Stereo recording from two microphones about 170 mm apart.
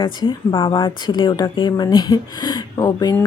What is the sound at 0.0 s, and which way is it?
Speech, 30° left (ahead or behind).